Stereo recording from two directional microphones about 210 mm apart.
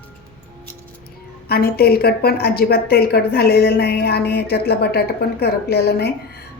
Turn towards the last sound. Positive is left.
turn(degrees=50)  # may be behind; listen again after turning